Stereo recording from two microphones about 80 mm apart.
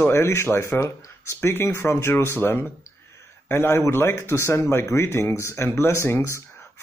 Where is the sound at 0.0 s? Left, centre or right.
Left.